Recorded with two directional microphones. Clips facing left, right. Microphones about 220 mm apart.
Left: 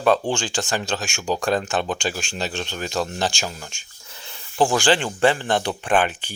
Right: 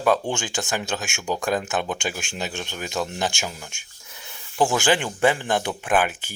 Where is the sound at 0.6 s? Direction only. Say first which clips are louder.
Left 2 dB; 20° right (ahead or behind).